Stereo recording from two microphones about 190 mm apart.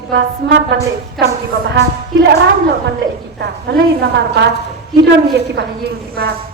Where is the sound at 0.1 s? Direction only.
65° right (ahead or behind).